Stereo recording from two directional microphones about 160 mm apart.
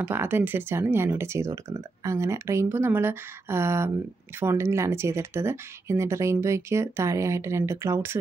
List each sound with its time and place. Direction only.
0.0 s speech: 15° right (ahead or behind)